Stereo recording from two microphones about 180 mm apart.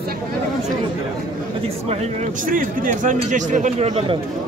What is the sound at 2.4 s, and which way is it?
Speech, 50° right (ahead or behind).